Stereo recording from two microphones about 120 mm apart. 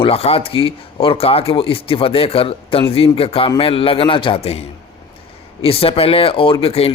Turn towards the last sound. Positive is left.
turn(degrees=55)  # may be behind; listen again after turning